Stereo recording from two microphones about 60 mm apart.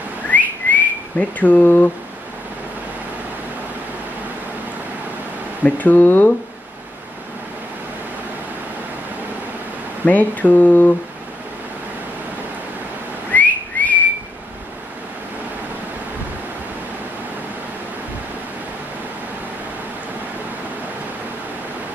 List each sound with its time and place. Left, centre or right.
0.3 s whistling: left
1.4 s speech: left
5.6 s speech: left
10.0 s speech: left
13.3 s whistling: left